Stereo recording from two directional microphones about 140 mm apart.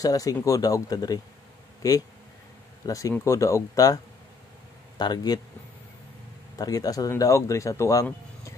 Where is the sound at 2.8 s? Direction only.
25° left (ahead or behind).